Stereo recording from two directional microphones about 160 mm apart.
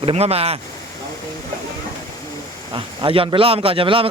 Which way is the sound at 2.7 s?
30° right (ahead or behind).